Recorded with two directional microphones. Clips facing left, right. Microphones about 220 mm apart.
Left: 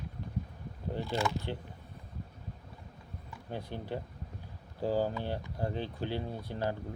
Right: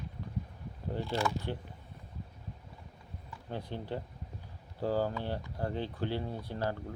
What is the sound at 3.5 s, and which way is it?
Speech, 10° left (ahead or behind).